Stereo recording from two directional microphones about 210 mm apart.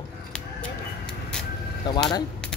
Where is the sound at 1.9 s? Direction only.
20° left (ahead or behind).